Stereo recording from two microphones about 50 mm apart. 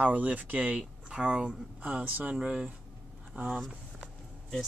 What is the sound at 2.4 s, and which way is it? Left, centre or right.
Speech, centre.